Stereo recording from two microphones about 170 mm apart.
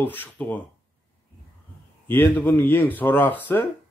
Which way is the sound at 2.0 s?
10° left (ahead or behind).